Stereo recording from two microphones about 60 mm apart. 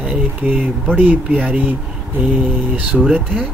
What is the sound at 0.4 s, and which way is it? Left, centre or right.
Speech, right.